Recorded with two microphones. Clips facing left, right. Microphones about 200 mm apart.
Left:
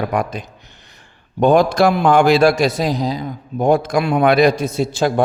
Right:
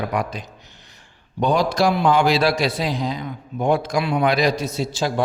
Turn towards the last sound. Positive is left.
turn(degrees=55)  # may be behind; listen again after turning